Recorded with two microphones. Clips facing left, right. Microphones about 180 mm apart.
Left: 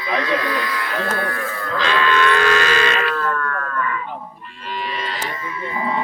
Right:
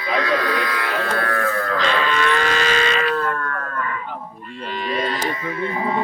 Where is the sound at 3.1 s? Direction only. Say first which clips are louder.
Even; 35° right (ahead or behind).